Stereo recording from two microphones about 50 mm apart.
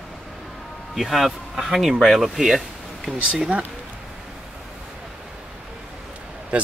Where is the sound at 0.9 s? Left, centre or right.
Centre.